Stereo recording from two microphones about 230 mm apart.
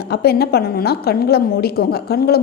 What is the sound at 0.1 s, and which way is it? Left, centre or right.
A woman's voice, left.